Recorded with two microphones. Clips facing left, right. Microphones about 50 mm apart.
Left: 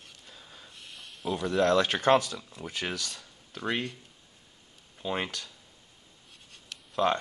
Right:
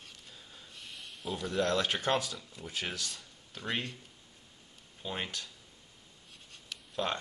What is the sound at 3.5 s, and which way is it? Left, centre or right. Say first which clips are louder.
Speech: left 5 dB; left.